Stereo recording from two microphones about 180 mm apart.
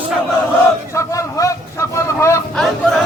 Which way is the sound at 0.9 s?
15° left (ahead or behind).